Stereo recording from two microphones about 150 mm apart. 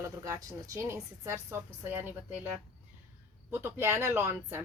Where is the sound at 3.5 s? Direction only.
15° right (ahead or behind).